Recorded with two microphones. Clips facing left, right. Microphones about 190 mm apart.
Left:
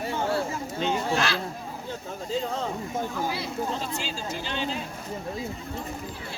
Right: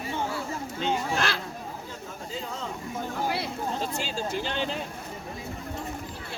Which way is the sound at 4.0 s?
55° right (ahead or behind).